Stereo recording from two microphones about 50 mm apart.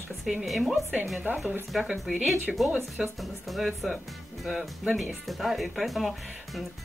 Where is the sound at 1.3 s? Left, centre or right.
Right.